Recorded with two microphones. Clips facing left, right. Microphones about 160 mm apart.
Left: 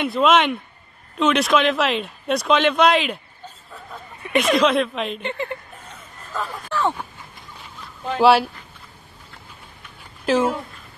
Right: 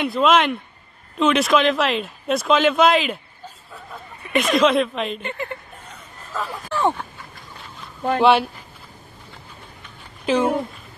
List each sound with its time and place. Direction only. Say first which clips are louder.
0.0 s speech: even; centre (ahead or behind)
5.2 s speech: left 2 dB; 20° left (ahead or behind)
5.9 s a sound: even; centre (ahead or behind)
6.7 s a sound: right 2 dB; 15° right (ahead or behind)
8.2 s speech: left 1 dB; 5° left (ahead or behind)
10.2 s speech: even; centre (ahead or behind)